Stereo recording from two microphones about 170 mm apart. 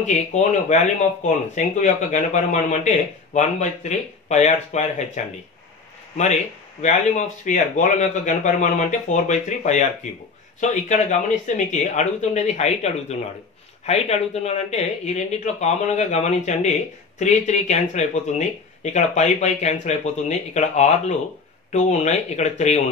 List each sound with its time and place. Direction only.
0.0 s speech: 45° left (ahead or behind)
4.3 s speech: 45° left (ahead or behind)